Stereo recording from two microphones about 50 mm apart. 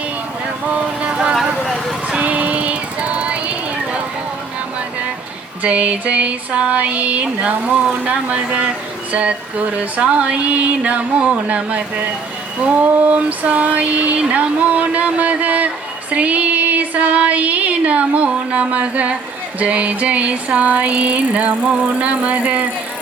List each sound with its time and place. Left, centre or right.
0.7 s vehicle: right
2.0 s music: right
5.6 s female singing: right
16.1 s child singing: right
19.5 s female singing: right